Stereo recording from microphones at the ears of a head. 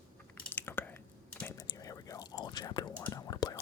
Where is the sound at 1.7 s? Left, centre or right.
Left.